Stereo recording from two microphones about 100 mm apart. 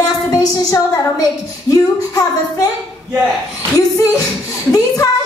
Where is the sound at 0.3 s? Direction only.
35° left (ahead or behind).